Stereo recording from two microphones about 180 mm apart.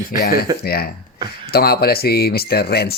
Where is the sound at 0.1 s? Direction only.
55° left (ahead or behind).